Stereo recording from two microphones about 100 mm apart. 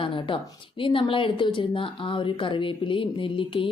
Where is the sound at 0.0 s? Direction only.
55° left (ahead or behind).